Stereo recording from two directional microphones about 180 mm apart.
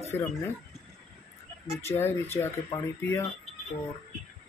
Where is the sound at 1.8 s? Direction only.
15° left (ahead or behind).